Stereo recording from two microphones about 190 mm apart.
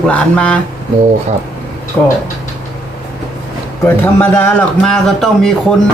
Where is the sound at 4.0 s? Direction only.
10° left (ahead or behind).